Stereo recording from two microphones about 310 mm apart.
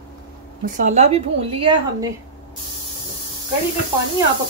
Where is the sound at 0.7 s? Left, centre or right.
Right.